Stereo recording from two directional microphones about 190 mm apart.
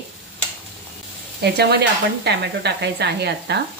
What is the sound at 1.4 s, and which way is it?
A woman's voice, 60° right (ahead or behind).